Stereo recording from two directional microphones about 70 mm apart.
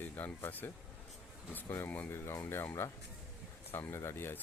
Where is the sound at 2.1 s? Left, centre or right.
Left.